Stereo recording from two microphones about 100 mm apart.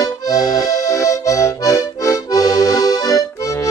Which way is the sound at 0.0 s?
35° left (ahead or behind).